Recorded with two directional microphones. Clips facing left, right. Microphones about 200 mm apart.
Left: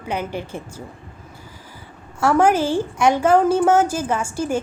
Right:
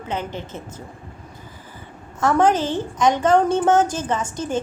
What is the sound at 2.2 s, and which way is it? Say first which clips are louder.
A woman's voice: left 1 dB; 10° left (ahead or behind).